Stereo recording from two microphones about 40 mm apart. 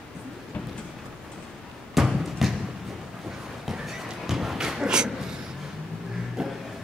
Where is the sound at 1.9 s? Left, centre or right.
Centre.